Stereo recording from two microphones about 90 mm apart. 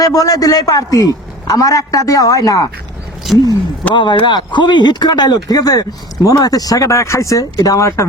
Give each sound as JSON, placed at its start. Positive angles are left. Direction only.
{"t": 0.0, "sound": "a man's voice", "side_deg": 40}
{"t": 3.3, "sound": "speech", "side_deg": -5}
{"t": 3.9, "sound": "a man's voice", "side_deg": 60}